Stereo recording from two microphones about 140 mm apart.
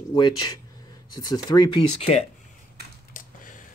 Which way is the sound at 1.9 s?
50° left (ahead or behind).